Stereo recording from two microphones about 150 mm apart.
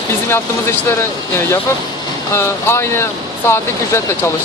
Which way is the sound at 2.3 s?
15° left (ahead or behind).